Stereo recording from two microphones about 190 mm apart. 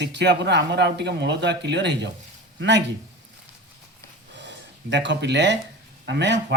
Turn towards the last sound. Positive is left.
turn(degrees=-65)  # may be behind; listen again after turning